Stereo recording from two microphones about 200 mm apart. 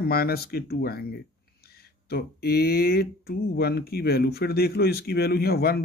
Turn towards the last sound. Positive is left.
turn(degrees=50)  # may be behind; listen again after turning